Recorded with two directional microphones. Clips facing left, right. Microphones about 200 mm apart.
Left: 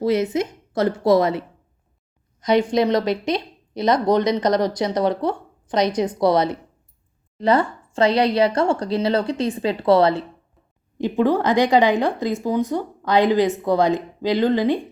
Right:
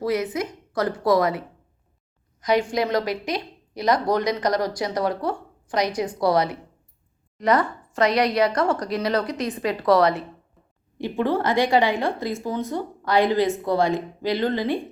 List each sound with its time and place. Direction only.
0.0 s a woman's voice: 25° left (ahead or behind)
10.9 s a woman's voice: 15° left (ahead or behind)